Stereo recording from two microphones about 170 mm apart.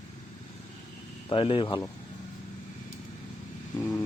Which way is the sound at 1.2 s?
30° left (ahead or behind).